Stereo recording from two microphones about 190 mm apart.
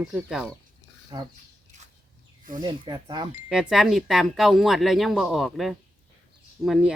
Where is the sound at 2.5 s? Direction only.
25° right (ahead or behind).